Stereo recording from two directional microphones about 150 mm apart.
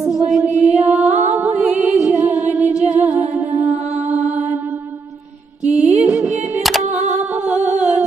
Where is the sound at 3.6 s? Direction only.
45° right (ahead or behind).